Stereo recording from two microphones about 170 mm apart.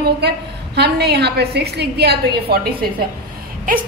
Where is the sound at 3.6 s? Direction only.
55° right (ahead or behind).